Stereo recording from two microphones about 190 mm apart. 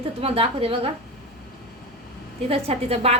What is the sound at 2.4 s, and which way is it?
Speech, 30° right (ahead or behind).